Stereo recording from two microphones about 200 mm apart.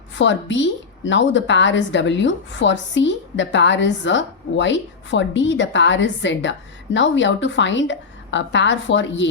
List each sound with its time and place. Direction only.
0.2 s a woman's voice: 65° left (ahead or behind)